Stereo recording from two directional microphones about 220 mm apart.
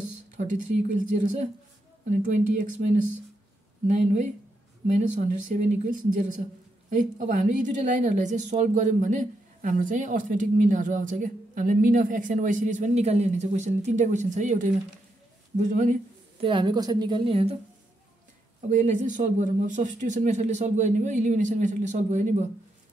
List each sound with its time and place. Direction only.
0.4 s speech: 35° right (ahead or behind)
15.5 s a sound: 35° right (ahead or behind)
16.4 s a woman's voice: 20° right (ahead or behind)
18.7 s speech: 35° right (ahead or behind)